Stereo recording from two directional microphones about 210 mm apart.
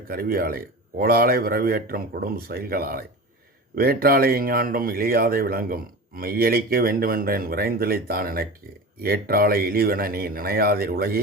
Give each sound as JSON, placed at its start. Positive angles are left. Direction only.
{"t": 0.1, "sound": "speech", "side_deg": -45}